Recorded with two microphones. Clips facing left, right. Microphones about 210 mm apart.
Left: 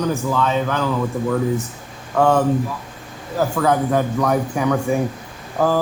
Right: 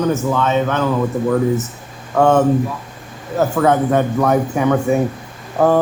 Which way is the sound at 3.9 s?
55° right (ahead or behind).